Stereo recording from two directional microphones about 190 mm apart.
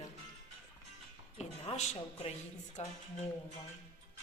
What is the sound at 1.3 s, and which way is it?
Speech, 35° left (ahead or behind).